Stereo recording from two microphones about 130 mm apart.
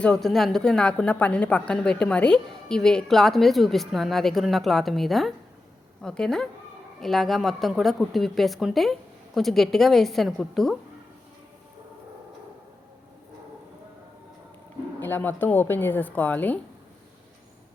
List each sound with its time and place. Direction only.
0.0 s a woman's voice: 5° left (ahead or behind)
15.0 s speech: 15° left (ahead or behind)